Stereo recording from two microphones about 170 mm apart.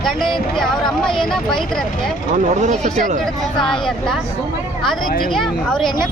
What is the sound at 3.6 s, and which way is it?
Speech, 25° left (ahead or behind).